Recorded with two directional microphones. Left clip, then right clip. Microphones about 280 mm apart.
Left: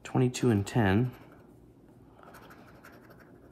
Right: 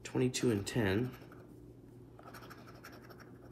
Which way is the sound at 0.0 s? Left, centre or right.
Centre.